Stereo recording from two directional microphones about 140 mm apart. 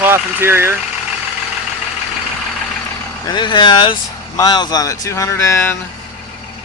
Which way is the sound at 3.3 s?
35° left (ahead or behind).